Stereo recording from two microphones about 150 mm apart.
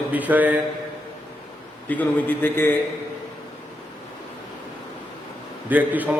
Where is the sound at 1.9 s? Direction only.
10° left (ahead or behind).